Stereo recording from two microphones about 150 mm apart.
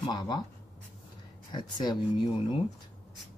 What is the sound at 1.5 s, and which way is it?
Speech, 25° left (ahead or behind).